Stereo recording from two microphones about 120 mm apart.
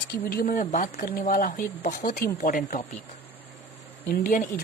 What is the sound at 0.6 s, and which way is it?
Speech, 90° left.